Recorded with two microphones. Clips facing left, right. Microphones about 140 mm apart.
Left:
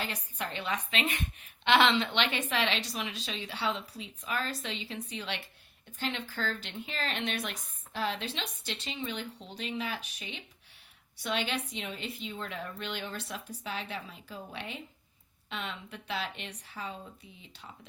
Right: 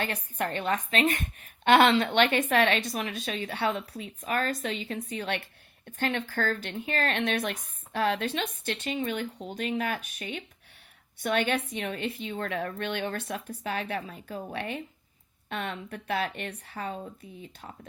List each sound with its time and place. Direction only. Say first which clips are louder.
0.0 s a woman's voice: right 6 dB; 55° right (ahead or behind)